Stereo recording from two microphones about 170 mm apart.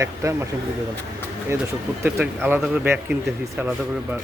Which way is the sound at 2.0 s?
10° right (ahead or behind).